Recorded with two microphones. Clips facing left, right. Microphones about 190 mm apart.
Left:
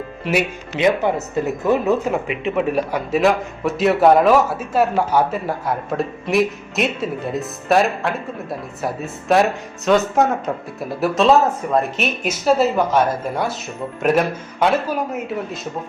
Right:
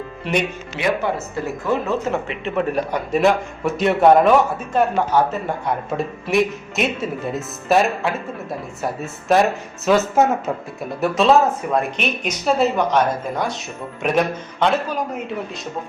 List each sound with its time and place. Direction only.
0.3 s a man's voice: centre (ahead or behind)
0.8 s speech: 20° left (ahead or behind)
2.2 s a man's voice: 5° left (ahead or behind)